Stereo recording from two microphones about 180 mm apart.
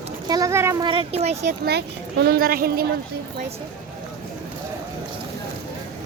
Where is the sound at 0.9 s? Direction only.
30° right (ahead or behind).